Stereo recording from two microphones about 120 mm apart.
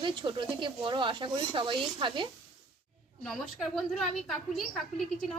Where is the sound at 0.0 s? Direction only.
40° right (ahead or behind).